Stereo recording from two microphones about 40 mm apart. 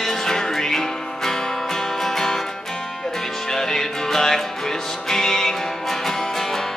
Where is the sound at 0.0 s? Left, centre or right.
Centre.